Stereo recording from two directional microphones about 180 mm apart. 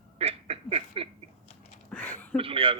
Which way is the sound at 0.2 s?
35° right (ahead or behind).